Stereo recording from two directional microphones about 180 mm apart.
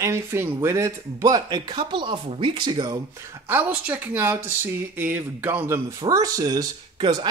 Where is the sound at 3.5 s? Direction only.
10° right (ahead or behind).